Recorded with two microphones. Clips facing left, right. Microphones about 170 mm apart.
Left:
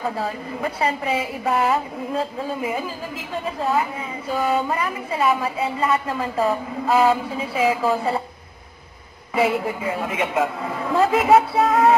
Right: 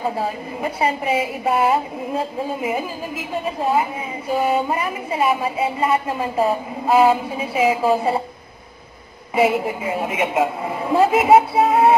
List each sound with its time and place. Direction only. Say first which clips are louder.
0.0 s a woman's voice: right 2 dB; 20° right (ahead or behind)
4.3 s a woman's voice: right 2 dB; 20° right (ahead or behind)
9.3 s a woman's voice: right 3 dB; 20° right (ahead or behind)